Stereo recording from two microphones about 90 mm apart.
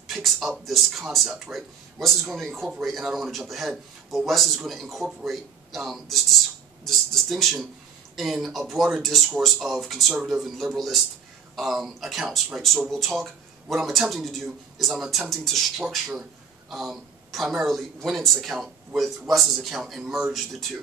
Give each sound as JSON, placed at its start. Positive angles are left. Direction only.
{"t": 0.1, "sound": "speech", "side_deg": 0}
{"t": 6.8, "sound": "a sound", "side_deg": 0}
{"t": 8.2, "sound": "speech", "side_deg": 0}